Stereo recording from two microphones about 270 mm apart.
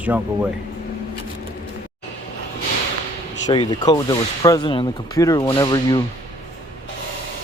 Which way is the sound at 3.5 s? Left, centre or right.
Centre.